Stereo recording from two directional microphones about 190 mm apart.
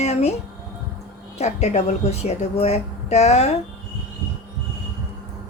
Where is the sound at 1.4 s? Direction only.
35° left (ahead or behind).